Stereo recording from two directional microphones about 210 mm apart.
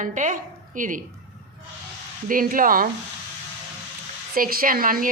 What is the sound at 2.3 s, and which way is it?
Speech, 40° right (ahead or behind).